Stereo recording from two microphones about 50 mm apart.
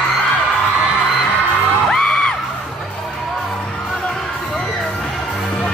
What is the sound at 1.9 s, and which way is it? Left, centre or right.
Music, centre.